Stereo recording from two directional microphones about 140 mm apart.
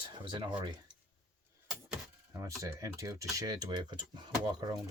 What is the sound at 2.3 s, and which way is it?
Speech, 20° right (ahead or behind).